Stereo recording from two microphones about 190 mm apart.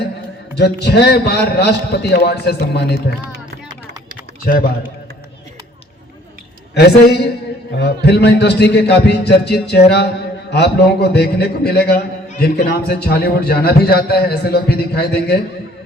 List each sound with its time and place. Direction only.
0.5 s a man's voice: 60° left (ahead or behind)
4.5 s a man's voice: 45° left (ahead or behind)
6.7 s a man's voice: 60° left (ahead or behind)